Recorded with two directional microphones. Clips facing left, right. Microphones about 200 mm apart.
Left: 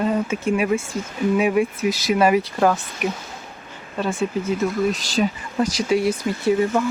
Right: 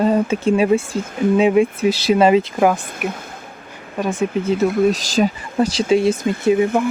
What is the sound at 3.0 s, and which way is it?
Speech, 5° right (ahead or behind).